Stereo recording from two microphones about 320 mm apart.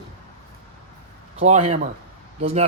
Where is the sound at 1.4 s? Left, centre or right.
Centre.